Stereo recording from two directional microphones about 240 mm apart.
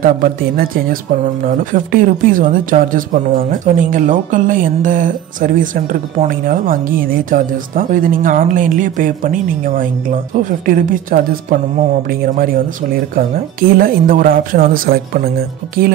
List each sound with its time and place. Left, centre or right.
0.0 s speech: right